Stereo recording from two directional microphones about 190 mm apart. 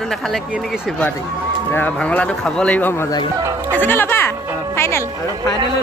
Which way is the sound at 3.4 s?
15° right (ahead or behind).